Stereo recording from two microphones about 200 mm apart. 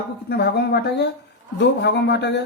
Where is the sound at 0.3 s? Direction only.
55° left (ahead or behind).